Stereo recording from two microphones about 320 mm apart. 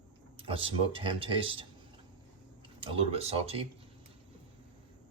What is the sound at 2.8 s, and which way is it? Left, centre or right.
Speech, centre.